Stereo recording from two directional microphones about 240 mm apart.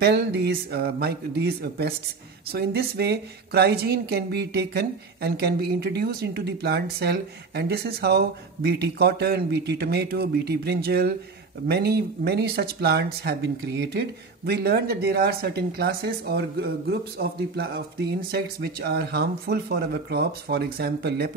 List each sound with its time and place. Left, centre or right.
0.0 s speech: right